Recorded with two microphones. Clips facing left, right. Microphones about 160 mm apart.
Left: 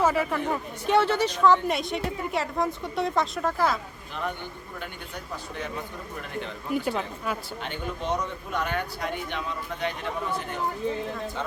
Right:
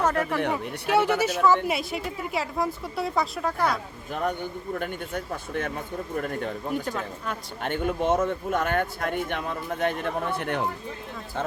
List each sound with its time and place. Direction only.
0.0 s speech: 5° left (ahead or behind)
0.5 s speech: 10° right (ahead or behind)
4.1 s speech: 45° right (ahead or behind)
6.8 s speech: 10° left (ahead or behind)
7.6 s speech: 50° right (ahead or behind)